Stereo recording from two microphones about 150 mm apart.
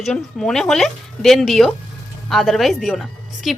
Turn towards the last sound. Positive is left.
turn(degrees=0)  # may be behind; listen again after turning